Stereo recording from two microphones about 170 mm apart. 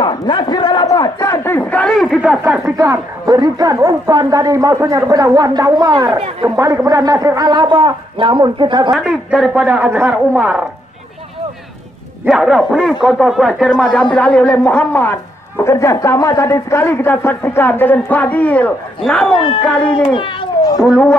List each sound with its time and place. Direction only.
0.0 s a sound: 30° left (ahead or behind); by 2.3 s centre (ahead or behind)
2.4 s speech: 5° right (ahead or behind)
2.8 s a woman's voice: 20° right (ahead or behind)
8.9 s a man's voice: 5° right (ahead or behind)
12.3 s a woman's voice: centre (ahead or behind)
19.3 s speech: 30° left (ahead or behind)
19.6 s a woman's voice: 10° left (ahead or behind)
20.2 s a sound: 30° left (ahead or behind)
20.9 s speech: 5° left (ahead or behind)